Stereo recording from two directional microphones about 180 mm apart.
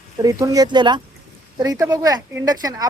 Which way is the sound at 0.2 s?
20° right (ahead or behind).